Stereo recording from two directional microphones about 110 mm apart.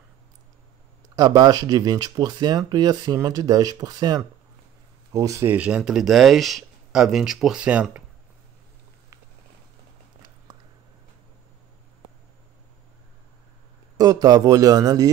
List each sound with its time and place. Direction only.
1.1 s speech: 35° right (ahead or behind)
5.5 s speech: 10° right (ahead or behind)
13.9 s speech: 35° right (ahead or behind)